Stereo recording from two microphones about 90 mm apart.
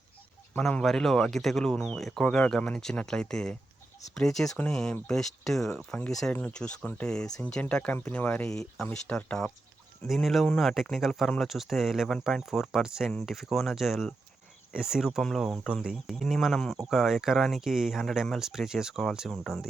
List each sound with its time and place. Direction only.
0.5 s speech: 10° left (ahead or behind)
8.4 s speech: 5° left (ahead or behind)
15.2 s speech: 5° left (ahead or behind)
15.4 s speech: 5° right (ahead or behind)